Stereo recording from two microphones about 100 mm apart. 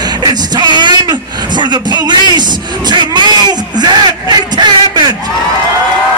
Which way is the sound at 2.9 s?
50° right (ahead or behind).